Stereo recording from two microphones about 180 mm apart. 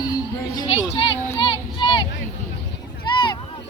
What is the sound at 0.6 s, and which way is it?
Speech, 35° left (ahead or behind).